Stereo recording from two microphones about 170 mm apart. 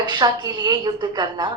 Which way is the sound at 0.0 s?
25° right (ahead or behind).